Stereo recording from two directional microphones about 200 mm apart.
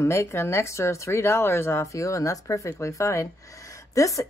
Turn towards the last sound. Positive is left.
turn(degrees=15)  # may be behind; listen again after turning